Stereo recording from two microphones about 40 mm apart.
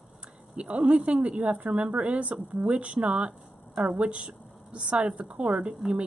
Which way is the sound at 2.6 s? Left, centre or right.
Right.